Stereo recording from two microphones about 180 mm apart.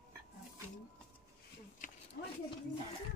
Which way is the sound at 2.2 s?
55° left (ahead or behind).